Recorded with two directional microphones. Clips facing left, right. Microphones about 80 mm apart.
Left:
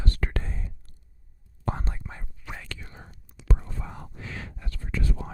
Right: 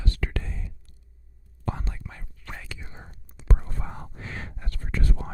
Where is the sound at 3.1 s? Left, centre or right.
Right.